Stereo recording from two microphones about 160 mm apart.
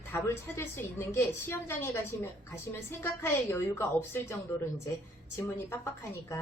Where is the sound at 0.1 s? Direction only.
15° left (ahead or behind).